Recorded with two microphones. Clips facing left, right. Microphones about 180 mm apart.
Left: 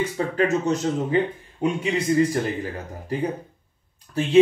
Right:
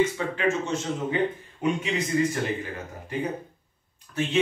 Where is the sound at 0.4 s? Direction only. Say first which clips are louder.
Left 5 dB; 40° left (ahead or behind).